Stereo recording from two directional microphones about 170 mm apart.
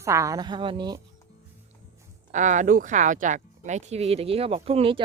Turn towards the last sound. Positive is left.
turn(degrees=-35)  # may be behind; listen again after turning